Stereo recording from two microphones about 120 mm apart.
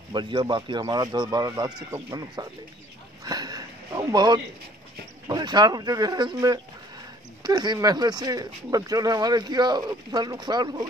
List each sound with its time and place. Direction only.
0.1 s speech: 40° right (ahead or behind)
3.3 s sniff: 35° right (ahead or behind)
5.3 s speech: 35° right (ahead or behind)